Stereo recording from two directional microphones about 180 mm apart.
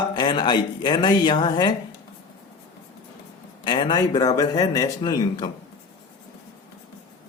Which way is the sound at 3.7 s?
30° left (ahead or behind).